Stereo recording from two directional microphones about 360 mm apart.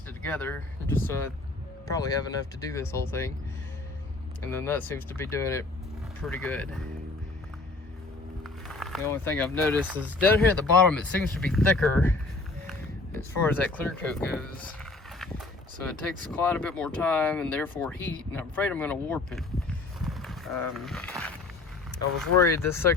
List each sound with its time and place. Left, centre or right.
0.2 s speech: centre
4.4 s speech: centre
8.4 s speech: centre
13.1 s speech: centre
15.8 s speech: centre
20.0 s a sound: centre
22.2 s speech: centre